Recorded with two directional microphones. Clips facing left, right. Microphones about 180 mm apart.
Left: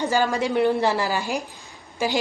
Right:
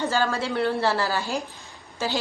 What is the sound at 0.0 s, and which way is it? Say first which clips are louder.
Speech: left 3 dB; 15° left (ahead or behind).